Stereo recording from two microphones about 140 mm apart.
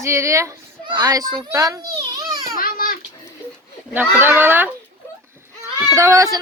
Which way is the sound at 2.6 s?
90° left.